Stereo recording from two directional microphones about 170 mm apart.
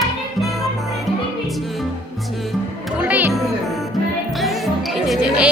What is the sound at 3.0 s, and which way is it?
Music, 10° right (ahead or behind).